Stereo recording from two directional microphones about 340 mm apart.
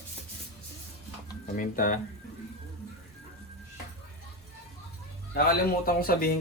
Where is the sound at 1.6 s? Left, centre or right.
Left.